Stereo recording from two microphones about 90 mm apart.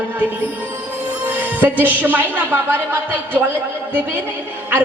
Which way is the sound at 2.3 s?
20° right (ahead or behind).